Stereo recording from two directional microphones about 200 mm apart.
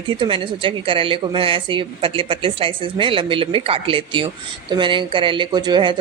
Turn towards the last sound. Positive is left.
turn(degrees=-20)  # may be behind; listen again after turning